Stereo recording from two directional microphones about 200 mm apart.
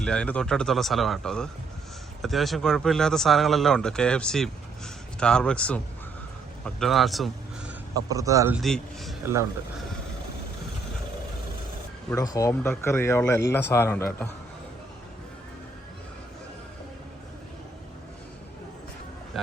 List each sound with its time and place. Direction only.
0.0 s speech: 5° left (ahead or behind)
7.9 s speech: 15° right (ahead or behind)
8.5 s speech: centre (ahead or behind)
9.2 s speech: 15° right (ahead or behind)
12.1 s speech: 15° left (ahead or behind)